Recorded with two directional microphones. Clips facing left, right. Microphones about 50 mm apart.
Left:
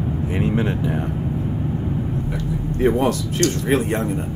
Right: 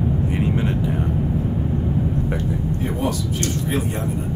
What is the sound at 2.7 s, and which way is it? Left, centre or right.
Speech, left.